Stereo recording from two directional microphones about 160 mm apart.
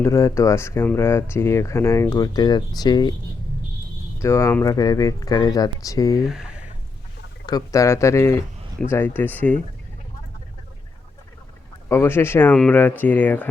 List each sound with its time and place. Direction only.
0.0 s speech: 20° left (ahead or behind)
4.2 s speech: 15° left (ahead or behind)
6.2 s a sound: 5° right (ahead or behind)
7.4 s speech: 20° left (ahead or behind)
11.9 s speech: 15° left (ahead or behind)